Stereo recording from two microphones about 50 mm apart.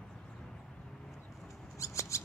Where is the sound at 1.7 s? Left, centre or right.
Left.